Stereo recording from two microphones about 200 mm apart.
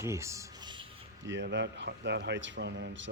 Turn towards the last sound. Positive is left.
turn(degrees=-60)  # may be behind; listen again after turning